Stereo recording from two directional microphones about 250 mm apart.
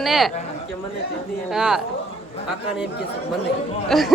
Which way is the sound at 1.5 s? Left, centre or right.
Centre.